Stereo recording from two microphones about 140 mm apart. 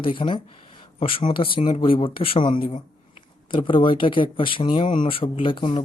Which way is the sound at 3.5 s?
35° left (ahead or behind).